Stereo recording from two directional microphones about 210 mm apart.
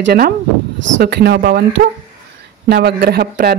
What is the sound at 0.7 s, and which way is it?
Speech, 60° right (ahead or behind).